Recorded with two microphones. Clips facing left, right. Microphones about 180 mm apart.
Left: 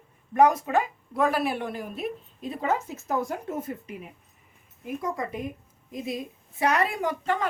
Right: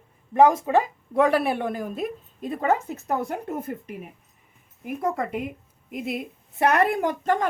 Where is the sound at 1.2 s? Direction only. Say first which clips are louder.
Right 4 dB; 65° right (ahead or behind).